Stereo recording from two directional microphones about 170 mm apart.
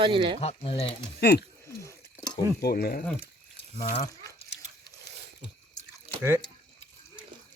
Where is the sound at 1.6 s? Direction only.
20° left (ahead or behind).